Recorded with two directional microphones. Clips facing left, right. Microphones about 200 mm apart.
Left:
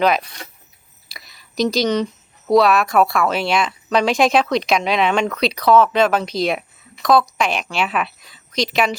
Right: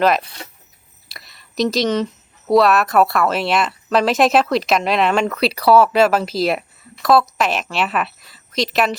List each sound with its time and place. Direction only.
0.0 s speech: centre (ahead or behind)